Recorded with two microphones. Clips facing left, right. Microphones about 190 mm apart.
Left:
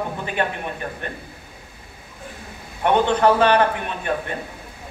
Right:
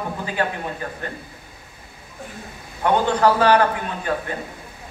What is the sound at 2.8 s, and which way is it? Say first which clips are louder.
Speech: left 1 dB; 20° left (ahead or behind).